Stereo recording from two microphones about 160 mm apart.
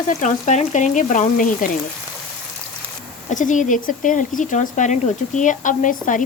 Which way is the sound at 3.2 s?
50° left (ahead or behind).